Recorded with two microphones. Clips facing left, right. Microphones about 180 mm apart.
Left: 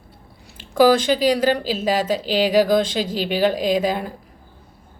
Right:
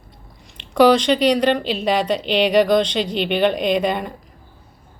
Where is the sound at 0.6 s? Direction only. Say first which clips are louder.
Right 1 dB; 5° left (ahead or behind).